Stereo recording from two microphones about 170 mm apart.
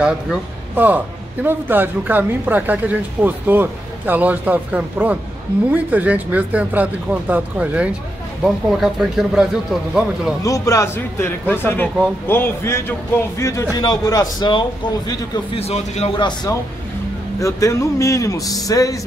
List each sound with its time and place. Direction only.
0.0 s a man's voice: 10° right (ahead or behind)
10.4 s a man's voice: 20° left (ahead or behind)
15.0 s a man's voice: 35° left (ahead or behind)
16.2 s a man's voice: 25° left (ahead or behind)